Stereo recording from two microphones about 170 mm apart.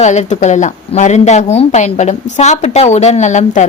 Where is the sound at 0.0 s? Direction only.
45° left (ahead or behind).